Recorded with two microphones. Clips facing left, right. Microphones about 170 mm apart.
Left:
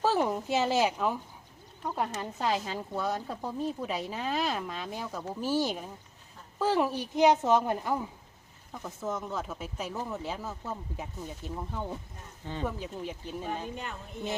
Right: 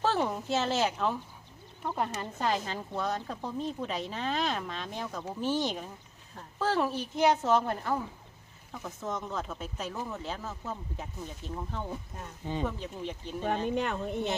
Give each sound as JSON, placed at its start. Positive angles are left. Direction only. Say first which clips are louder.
{"t": 0.0, "sound": "speech", "louder": "left 2 dB", "side_deg": 10}
{"t": 13.7, "sound": "speech", "louder": "right 9 dB", "side_deg": -75}